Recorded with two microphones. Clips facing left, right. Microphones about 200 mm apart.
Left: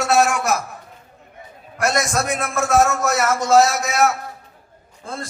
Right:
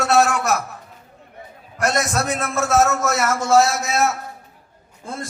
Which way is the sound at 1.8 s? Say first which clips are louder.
Even; 10° left (ahead or behind).